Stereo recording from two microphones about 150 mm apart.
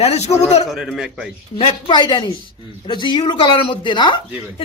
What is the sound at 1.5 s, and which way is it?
Speech, 35° left (ahead or behind).